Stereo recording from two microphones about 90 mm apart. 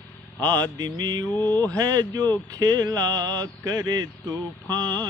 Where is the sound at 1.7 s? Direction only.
45° right (ahead or behind).